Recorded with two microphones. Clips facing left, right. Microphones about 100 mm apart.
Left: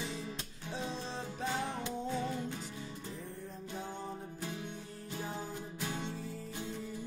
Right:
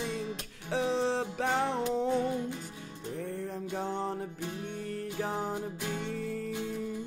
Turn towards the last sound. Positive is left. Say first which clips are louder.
# right 6 dB
turn(degrees=-65)  # may be behind; listen again after turning